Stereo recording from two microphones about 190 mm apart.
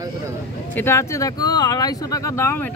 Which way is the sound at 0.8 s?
15° left (ahead or behind).